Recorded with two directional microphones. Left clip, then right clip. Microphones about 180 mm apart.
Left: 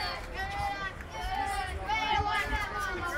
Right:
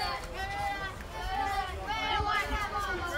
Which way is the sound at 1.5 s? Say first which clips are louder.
Left 1 dB; 50° left (ahead or behind).